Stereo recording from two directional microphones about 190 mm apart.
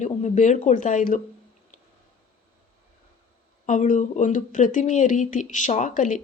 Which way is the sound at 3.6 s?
40° left (ahead or behind).